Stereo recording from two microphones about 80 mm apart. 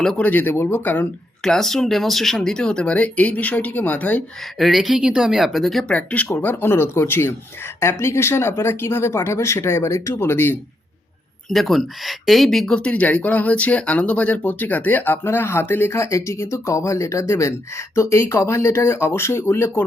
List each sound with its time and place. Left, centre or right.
0.2 s speech: left
1.5 s speech: centre; by 4.2 s left
4.5 s speech: centre
5.9 s speech: centre
11.5 s speech: centre; by 19.8 s left